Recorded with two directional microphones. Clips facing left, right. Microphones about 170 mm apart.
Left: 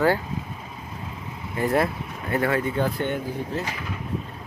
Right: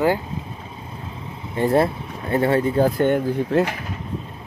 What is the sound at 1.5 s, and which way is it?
Speech, 30° right (ahead or behind).